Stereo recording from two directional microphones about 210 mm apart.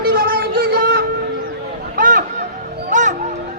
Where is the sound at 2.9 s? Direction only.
35° right (ahead or behind).